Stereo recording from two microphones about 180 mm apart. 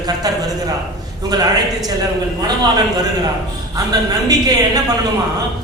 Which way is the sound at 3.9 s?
20° right (ahead or behind).